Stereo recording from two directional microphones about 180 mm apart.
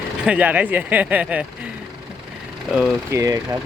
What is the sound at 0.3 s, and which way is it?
Speech, 5° right (ahead or behind).